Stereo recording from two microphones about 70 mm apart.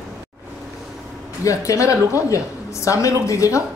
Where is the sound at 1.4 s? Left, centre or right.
Left.